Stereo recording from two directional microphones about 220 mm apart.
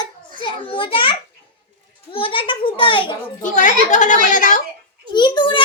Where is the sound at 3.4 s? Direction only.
35° left (ahead or behind).